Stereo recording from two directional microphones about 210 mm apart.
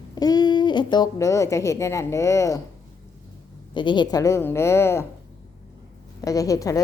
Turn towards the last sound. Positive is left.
turn(degrees=15)  # may be behind; listen again after turning